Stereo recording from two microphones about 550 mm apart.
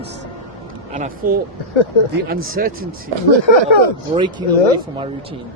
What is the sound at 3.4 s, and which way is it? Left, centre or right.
Speech, left.